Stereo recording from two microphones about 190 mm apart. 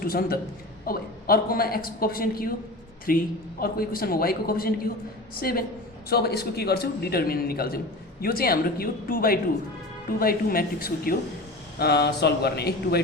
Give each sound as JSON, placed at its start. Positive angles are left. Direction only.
{"t": 0.0, "sound": "a man's voice", "side_deg": 50}